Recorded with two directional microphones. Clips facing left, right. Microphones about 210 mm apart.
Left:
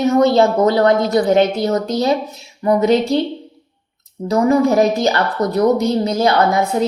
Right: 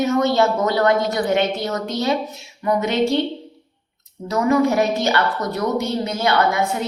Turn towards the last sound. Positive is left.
turn(degrees=35)  # may be behind; listen again after turning